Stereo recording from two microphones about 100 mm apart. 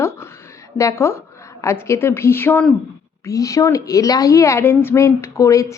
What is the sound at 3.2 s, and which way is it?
A woman's voice, 35° left (ahead or behind).